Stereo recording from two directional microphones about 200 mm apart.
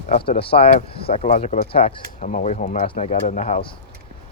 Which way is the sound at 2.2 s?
40° left (ahead or behind).